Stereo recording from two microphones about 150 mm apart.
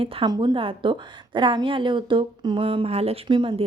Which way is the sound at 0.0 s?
35° right (ahead or behind).